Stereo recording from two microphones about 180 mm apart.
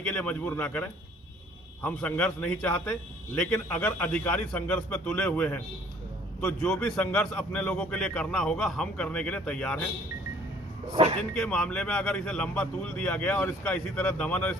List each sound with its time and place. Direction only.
0.1 s a man's voice: 5° left (ahead or behind)
10.9 s speech: 30° right (ahead or behind)
11.3 s a man's voice: 5° left (ahead or behind)